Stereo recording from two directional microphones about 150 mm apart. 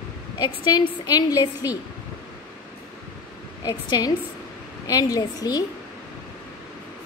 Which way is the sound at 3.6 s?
25° left (ahead or behind).